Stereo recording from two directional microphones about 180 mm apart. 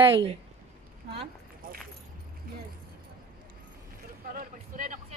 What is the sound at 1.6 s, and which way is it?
Keys jangling, 50° right (ahead or behind).